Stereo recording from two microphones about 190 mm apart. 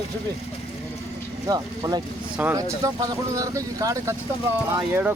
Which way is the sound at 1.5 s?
20° right (ahead or behind).